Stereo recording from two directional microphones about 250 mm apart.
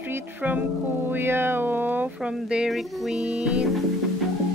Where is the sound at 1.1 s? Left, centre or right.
Centre.